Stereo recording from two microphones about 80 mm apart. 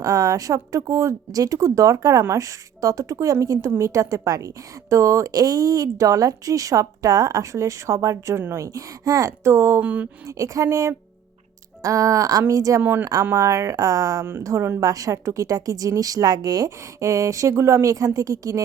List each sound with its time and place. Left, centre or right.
0.0 s a woman's voice: right
9.8 s speech: centre
10.2 s a woman's voice: right
12.8 s speech: right
13.3 s a woman's voice: right